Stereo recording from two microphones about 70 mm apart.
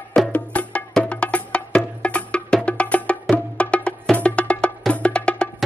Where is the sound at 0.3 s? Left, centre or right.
Centre.